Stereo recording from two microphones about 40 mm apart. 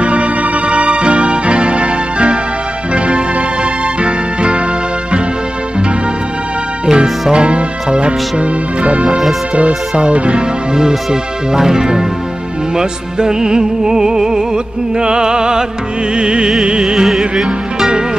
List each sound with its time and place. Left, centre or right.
0.0 s music: right
6.9 s music: right
10.1 s speech: right
10.7 s music: centre
16.9 s music: centre